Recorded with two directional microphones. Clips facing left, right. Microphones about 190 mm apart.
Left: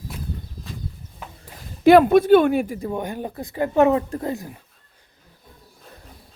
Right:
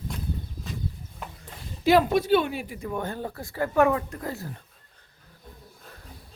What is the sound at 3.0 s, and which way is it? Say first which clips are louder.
Speech: left 3 dB; 15° left (ahead or behind).